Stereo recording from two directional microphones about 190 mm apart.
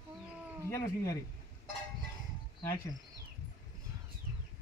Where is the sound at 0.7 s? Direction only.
15° left (ahead or behind).